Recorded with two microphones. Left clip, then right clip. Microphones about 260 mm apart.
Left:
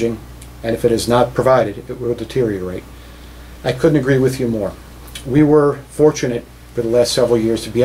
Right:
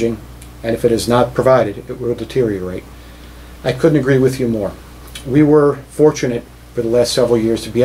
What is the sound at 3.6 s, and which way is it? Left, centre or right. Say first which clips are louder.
Speech: right 1 dB; centre.